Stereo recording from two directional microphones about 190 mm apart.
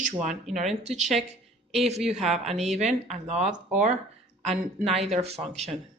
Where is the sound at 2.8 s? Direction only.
35° right (ahead or behind).